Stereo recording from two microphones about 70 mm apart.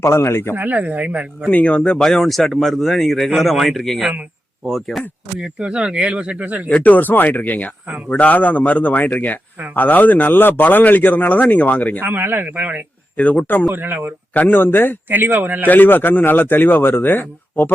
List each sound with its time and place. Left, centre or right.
0.0 s speech: left
0.5 s speech: right
1.5 s speech: centre
2.0 s speech: centre
5.4 s speech: centre
6.7 s speech: left
11.9 s speech: right
13.1 s speech: left
13.7 s speech: right
14.3 s speech: left
15.1 s speech: right
15.6 s speech: left